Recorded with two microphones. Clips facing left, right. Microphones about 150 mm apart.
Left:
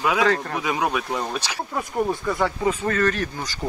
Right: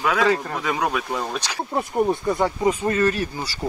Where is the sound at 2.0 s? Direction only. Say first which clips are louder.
Right 2 dB; 20° right (ahead or behind).